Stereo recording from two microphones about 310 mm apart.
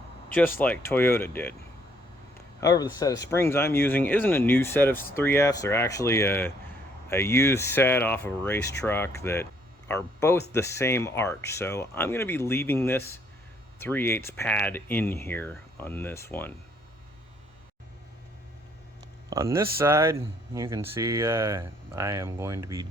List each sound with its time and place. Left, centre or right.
0.3 s speech: centre
2.6 s speech: centre
19.3 s speech: centre